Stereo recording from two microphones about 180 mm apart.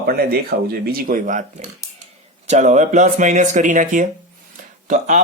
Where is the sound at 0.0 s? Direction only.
60° right (ahead or behind).